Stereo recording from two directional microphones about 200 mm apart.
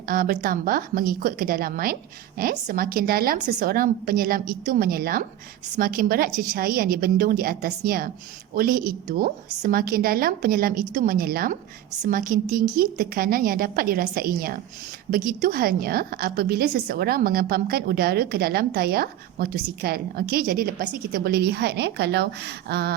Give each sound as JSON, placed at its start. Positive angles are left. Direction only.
{"t": 0.1, "sound": "a woman's voice", "side_deg": -45}